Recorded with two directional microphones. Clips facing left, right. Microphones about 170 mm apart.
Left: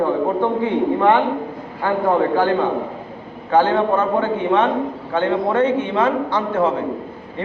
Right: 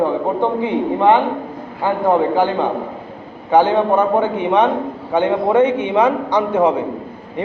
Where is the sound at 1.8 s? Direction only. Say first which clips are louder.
Right 1 dB; 15° right (ahead or behind).